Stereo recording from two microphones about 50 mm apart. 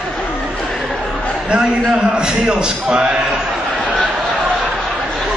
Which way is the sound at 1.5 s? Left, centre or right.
Centre.